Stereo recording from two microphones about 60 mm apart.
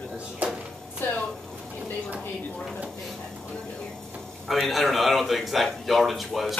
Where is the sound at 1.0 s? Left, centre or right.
Left.